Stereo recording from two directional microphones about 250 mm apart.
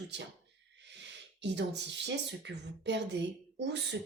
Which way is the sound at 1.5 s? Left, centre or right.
Right.